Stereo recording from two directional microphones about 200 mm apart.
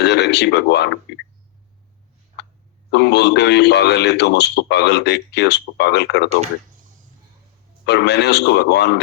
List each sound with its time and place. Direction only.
0.0 s speech: 60° left (ahead or behind)
2.9 s a man's voice: 60° left (ahead or behind)
7.9 s a man's voice: 60° left (ahead or behind)